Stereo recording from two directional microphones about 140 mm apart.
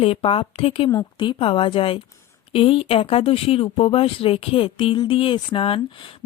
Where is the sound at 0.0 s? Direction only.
40° left (ahead or behind).